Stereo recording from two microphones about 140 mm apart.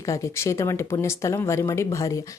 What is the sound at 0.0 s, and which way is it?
Speech, 20° left (ahead or behind).